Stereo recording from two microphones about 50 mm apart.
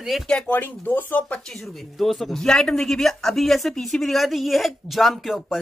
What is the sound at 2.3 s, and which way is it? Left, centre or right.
Speech, centre.